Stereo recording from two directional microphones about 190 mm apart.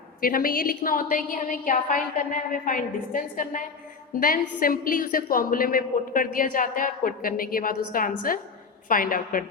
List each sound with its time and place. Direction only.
0.2 s a woman's voice: 50° left (ahead or behind)